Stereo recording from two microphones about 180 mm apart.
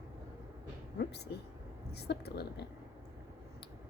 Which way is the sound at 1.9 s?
65° left (ahead or behind).